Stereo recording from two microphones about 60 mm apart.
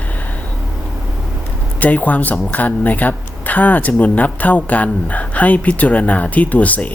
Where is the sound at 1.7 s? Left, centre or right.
Left.